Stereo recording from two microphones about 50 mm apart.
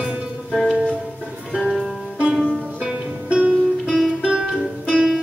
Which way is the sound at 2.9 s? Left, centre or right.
Right.